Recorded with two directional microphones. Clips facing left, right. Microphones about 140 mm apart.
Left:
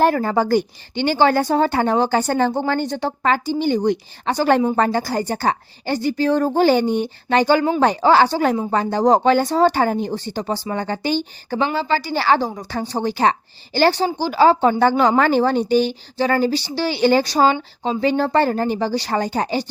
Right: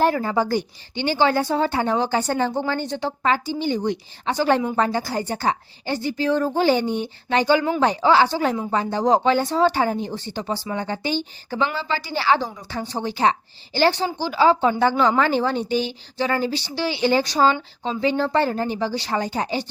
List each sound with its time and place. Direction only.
0.0 s speech: 55° left (ahead or behind)